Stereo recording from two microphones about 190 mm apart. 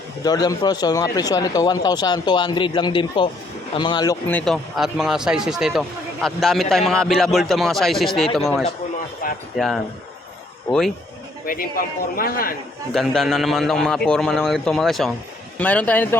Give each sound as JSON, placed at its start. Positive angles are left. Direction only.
{"t": 0.3, "sound": "a man's voice", "side_deg": 20}
{"t": 9.2, "sound": "a sound", "side_deg": 50}
{"t": 9.6, "sound": "a man's voice", "side_deg": 0}
{"t": 11.4, "sound": "a man's voice", "side_deg": 50}
{"t": 12.9, "sound": "a man's voice", "side_deg": 0}